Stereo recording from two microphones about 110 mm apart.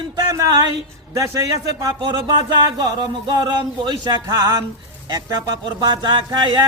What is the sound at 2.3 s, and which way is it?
Music, 40° right (ahead or behind).